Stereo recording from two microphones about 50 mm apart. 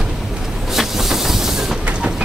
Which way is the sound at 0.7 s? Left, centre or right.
Centre.